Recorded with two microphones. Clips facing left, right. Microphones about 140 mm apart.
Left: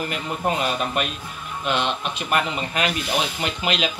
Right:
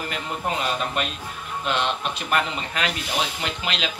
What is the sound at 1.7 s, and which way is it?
Speech, centre (ahead or behind).